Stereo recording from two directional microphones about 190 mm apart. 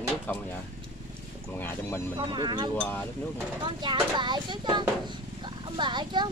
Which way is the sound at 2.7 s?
10° left (ahead or behind).